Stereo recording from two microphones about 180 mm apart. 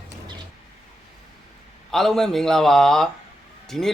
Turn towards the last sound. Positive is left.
turn(degrees=0)  # may be behind; listen again after turning